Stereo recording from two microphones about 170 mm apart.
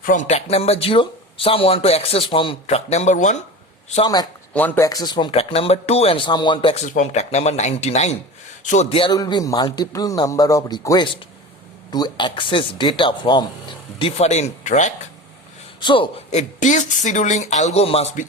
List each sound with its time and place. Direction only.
0.0 s speech: 50° left (ahead or behind)
4.0 s speech: 25° left (ahead or behind)
4.5 s speech: 10° left (ahead or behind)
4.9 s speech: 25° left (ahead or behind)
9.1 s speech: 20° left (ahead or behind); by 14.9 s 45° left (ahead or behind)
15.8 s speech: 30° left (ahead or behind)